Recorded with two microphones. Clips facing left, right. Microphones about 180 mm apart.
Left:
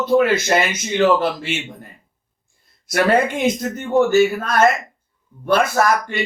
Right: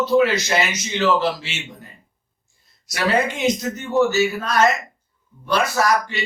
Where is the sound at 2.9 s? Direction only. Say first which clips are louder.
Left 4 dB; 55° left (ahead or behind).